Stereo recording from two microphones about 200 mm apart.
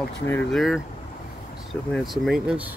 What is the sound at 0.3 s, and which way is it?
Speech, 5° left (ahead or behind).